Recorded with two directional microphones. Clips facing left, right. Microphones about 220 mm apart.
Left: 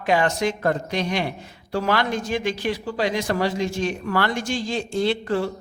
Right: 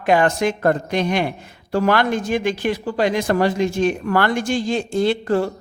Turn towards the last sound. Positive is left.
turn(degrees=-45)  # may be behind; listen again after turning